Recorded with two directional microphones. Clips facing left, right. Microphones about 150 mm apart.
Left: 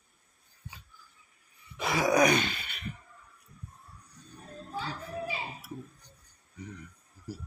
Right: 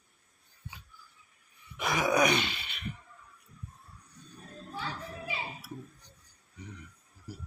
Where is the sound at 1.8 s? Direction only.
30° left (ahead or behind).